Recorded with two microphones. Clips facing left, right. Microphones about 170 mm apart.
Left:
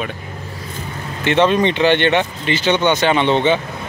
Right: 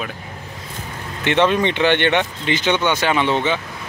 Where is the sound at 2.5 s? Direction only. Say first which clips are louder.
Left 3 dB; 15° right (ahead or behind).